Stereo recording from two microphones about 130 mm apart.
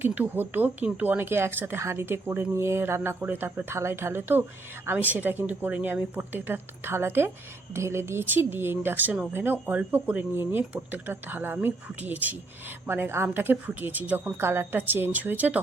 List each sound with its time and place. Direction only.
0.0 s speech: 15° right (ahead or behind)